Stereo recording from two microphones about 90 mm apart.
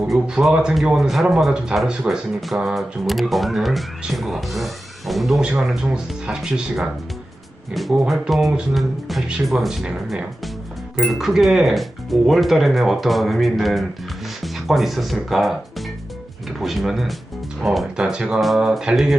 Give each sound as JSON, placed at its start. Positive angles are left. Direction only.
{"t": 0.1, "sound": "speech", "side_deg": -5}